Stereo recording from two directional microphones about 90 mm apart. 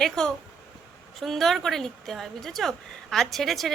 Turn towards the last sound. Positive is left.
turn(degrees=0)  # may be behind; listen again after turning